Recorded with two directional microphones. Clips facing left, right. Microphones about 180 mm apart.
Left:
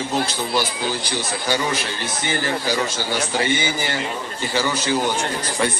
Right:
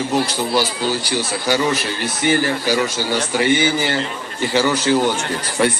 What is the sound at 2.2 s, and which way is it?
A man's voice, 15° right (ahead or behind).